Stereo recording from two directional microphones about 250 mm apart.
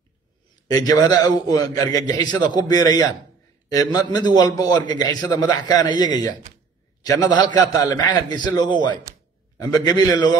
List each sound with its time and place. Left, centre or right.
0.7 s a man's voice: centre